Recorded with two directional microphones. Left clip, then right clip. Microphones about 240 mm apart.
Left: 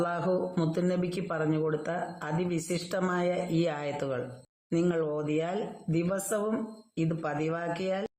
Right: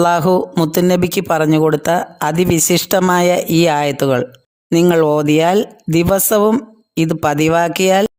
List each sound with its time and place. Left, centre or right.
0.0 s speech: right